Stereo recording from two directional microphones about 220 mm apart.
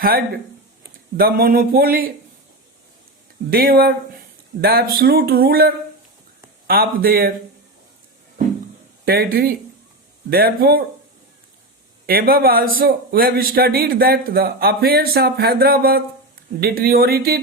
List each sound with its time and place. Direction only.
1.1 s speech: 40° right (ahead or behind)
3.5 s a man's voice: 45° right (ahead or behind)
9.0 s a man's voice: 45° right (ahead or behind)
12.0 s a man's voice: 40° right (ahead or behind)